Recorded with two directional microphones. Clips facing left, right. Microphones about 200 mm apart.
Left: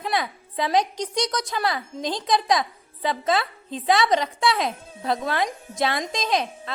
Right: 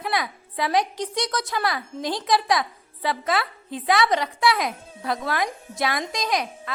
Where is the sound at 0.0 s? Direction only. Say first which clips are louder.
Left 1 dB; 25° left (ahead or behind).